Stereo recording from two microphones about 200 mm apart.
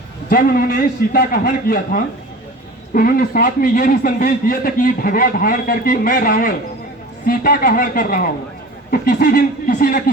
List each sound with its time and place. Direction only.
0.3 s a man's voice: 45° left (ahead or behind)